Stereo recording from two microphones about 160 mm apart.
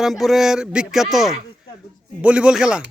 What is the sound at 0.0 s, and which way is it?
Speech, centre (ahead or behind).